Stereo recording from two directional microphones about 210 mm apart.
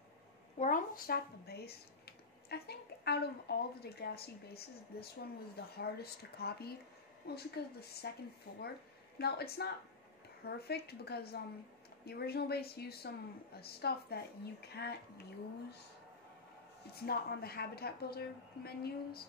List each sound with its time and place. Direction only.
0.6 s speech: 40° left (ahead or behind)
17.0 s speech: 45° left (ahead or behind)